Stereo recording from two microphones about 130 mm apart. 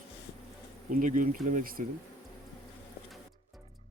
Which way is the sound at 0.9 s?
85° right.